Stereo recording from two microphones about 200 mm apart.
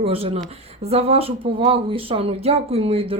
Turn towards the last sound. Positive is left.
turn(degrees=-30)  # may be behind; listen again after turning